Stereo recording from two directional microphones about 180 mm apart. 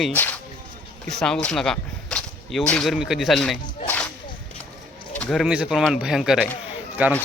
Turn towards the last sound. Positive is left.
turn(degrees=-10)  # may be behind; listen again after turning